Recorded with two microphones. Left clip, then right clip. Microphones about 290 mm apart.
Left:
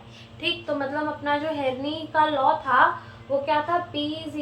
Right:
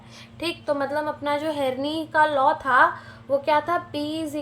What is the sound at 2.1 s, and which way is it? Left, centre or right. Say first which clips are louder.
Speech: right 2 dB; right.